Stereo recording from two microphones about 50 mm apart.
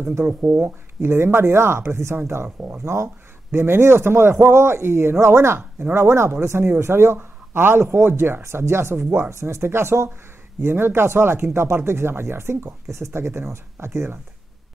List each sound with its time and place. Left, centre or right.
0.3 s speech: right
2.8 s speech: right
3.5 s speech: right
5.6 s speech: right
5.9 s speech: right
9.3 s speech: right
10.6 s speech: right